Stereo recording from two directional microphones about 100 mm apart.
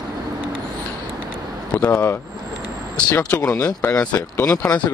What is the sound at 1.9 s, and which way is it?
Speech, 25° left (ahead or behind).